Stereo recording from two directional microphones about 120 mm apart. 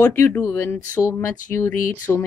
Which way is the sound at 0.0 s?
20° left (ahead or behind).